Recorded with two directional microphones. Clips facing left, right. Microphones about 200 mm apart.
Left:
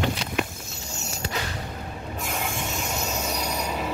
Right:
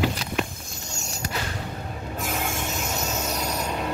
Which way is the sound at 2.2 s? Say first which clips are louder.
Right 1 dB; centre (ahead or behind).